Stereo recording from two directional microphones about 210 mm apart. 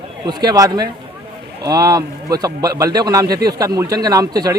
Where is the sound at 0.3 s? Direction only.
15° right (ahead or behind).